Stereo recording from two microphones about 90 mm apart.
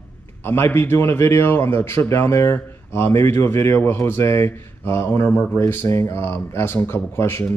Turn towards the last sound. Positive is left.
turn(degrees=25)  # may be behind; listen again after turning